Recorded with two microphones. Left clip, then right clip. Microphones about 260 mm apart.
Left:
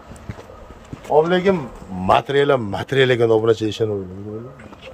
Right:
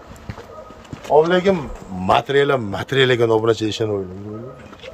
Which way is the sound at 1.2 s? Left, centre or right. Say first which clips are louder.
Right 1 dB; centre.